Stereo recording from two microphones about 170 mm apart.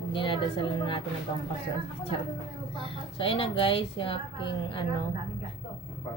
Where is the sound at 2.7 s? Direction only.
30° left (ahead or behind).